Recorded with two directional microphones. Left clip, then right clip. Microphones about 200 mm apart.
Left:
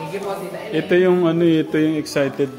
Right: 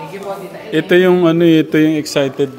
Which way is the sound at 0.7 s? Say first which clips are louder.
Right 5 dB; 45° right (ahead or behind).